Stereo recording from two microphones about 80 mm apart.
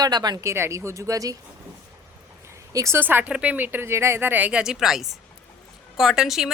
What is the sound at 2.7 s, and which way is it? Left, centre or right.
Speech, right.